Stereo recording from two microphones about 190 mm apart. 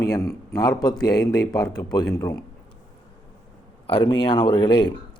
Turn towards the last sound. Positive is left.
turn(degrees=20)  # may be behind; listen again after turning